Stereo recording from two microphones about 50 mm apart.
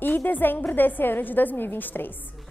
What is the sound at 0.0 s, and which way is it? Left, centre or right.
A woman's voice, left.